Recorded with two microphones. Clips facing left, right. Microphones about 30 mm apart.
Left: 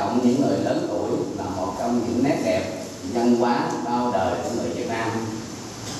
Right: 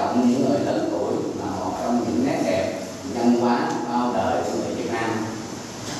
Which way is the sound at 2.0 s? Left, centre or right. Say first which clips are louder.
Even; centre.